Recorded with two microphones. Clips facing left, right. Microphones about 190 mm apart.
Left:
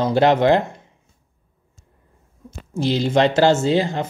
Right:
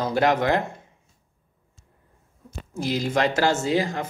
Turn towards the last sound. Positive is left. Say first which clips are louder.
# left 4 dB
turn(degrees=30)  # may be behind; listen again after turning